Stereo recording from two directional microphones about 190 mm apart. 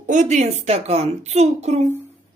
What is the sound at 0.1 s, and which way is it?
Speech, 40° right (ahead or behind).